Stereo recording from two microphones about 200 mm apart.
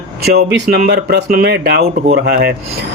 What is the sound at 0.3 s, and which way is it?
Speech, 50° right (ahead or behind).